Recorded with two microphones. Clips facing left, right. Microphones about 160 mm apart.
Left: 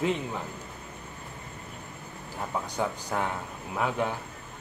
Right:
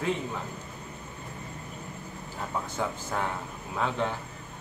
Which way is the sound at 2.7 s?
15° left (ahead or behind).